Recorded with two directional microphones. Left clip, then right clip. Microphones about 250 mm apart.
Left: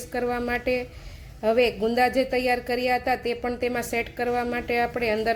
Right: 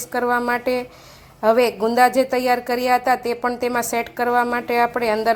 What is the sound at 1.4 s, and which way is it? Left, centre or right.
A woman's voice, right.